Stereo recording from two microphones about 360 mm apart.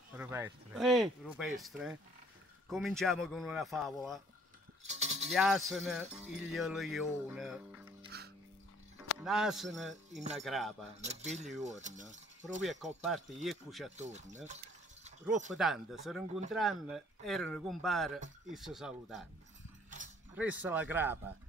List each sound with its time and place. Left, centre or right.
0.1 s music: centre
4.8 s music: centre
5.3 s music: centre
9.2 s music: centre
11.0 s mechanisms: centre
12.6 s music: centre
13.9 s mechanisms: centre
15.5 s music: centre
20.3 s music: centre